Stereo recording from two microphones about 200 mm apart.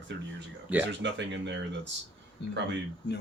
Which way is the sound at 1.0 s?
60° right (ahead or behind).